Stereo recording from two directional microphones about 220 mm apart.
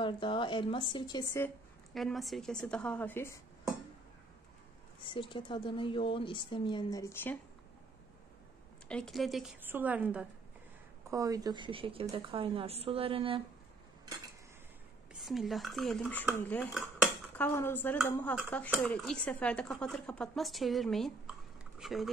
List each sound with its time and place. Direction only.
0.0 s a woman's voice: 20° left (ahead or behind)
2.0 s speech: centre (ahead or behind)
5.0 s a woman's voice: 25° left (ahead or behind)
8.8 s a woman's voice: 5° left (ahead or behind); by 13.4 s 25° right (ahead or behind)
15.1 s speech: centre (ahead or behind)